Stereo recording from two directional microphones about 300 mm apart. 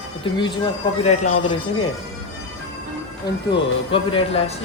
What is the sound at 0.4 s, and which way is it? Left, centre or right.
Speech, centre.